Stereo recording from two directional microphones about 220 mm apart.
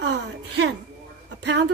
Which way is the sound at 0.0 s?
55° right (ahead or behind).